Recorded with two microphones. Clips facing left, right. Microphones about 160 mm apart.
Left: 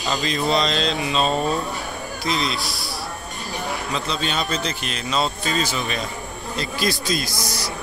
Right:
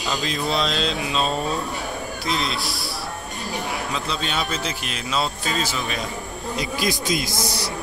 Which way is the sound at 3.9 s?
Centre (ahead or behind).